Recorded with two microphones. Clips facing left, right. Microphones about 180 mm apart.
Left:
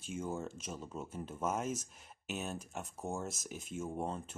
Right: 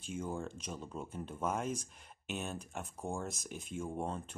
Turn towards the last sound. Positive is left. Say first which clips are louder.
# even
turn(degrees=5)  # may be behind; listen again after turning